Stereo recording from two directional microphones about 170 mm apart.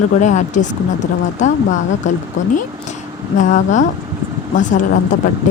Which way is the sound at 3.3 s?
45° left (ahead or behind).